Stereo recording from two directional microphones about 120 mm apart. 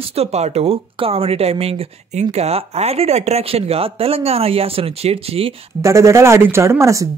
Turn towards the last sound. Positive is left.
turn(degrees=-25)  # may be behind; listen again after turning